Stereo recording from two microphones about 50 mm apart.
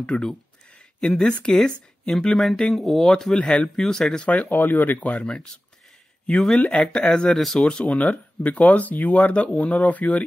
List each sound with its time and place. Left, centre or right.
0.0 s a sound: centre
1.5 s speech: centre
4.2 s speech: left
4.6 s speech: left
5.0 s speech: left
6.3 s speech: centre
7.3 s speech: centre
7.6 s speech: centre